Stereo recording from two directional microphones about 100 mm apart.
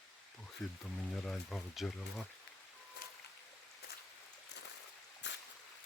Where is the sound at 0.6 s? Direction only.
5° left (ahead or behind).